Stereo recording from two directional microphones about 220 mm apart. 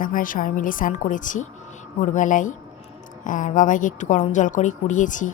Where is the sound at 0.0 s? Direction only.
40° left (ahead or behind).